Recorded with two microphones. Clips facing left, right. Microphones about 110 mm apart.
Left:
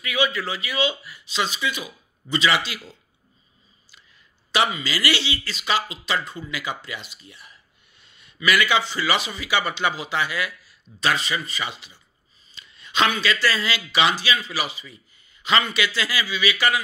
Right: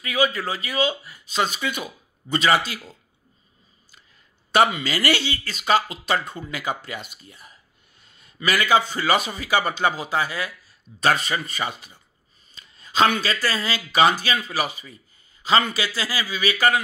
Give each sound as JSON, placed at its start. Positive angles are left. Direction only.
{"t": 0.0, "sound": "speech", "side_deg": -40}
{"t": 4.8, "sound": "a man's voice", "side_deg": -50}
{"t": 11.0, "sound": "speech", "side_deg": -50}
{"t": 12.5, "sound": "a sound", "side_deg": -40}
{"t": 13.2, "sound": "speech", "side_deg": -40}
{"t": 15.4, "sound": "a man's voice", "side_deg": -35}